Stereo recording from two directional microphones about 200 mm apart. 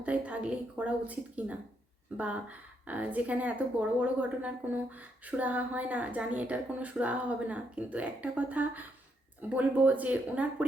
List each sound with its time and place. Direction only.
0.0 s speech: 5° right (ahead or behind)